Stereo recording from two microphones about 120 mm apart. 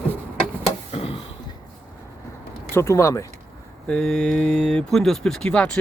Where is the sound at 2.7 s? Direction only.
25° left (ahead or behind).